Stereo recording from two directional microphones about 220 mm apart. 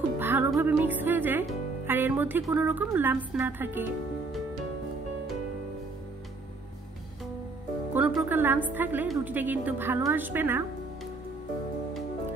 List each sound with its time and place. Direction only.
0.2 s music: 10° right (ahead or behind)
7.9 s a woman's voice: 5° right (ahead or behind)